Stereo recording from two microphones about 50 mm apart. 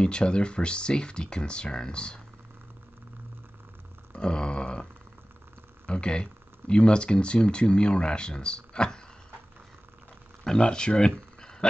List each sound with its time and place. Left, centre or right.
0.0 s speech: centre
4.1 s a sound: centre
5.9 s speech: centre
10.4 s speech: centre